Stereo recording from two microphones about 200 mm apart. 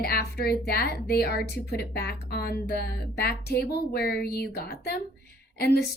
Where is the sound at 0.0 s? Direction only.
50° left (ahead or behind).